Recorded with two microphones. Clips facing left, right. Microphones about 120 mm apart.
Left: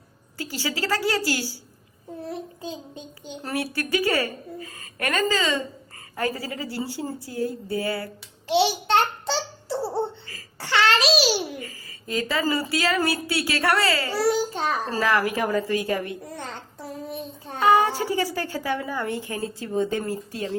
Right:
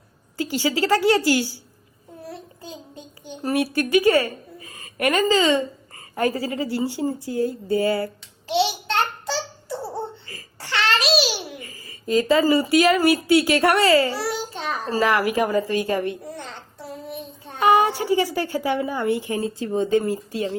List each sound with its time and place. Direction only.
0.3 s speech: 25° right (ahead or behind)
2.3 s a child's voice: 20° left (ahead or behind)
3.4 s speech: 20° right (ahead or behind)
8.4 s a child's voice: 30° left (ahead or behind)
10.6 s babbling: 25° left (ahead or behind)
11.6 s speech: 25° right (ahead or behind)
14.2 s babbling: 40° left (ahead or behind)
14.9 s speech: 15° right (ahead or behind)
17.6 s a woman's voice: 15° right (ahead or behind)